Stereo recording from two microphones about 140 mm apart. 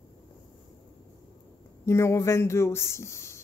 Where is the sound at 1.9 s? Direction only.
20° left (ahead or behind).